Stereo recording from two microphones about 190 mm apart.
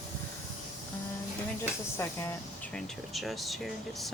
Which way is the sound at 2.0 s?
15° left (ahead or behind).